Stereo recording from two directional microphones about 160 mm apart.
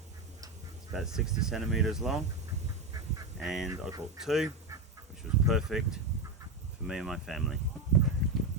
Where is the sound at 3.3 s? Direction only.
Centre (ahead or behind).